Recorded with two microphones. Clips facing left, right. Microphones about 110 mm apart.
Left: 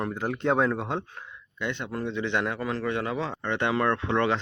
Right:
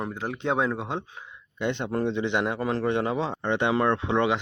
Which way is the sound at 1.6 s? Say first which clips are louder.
Right 5 dB; 25° right (ahead or behind).